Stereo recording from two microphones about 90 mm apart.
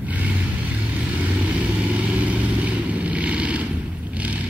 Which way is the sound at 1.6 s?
15° right (ahead or behind).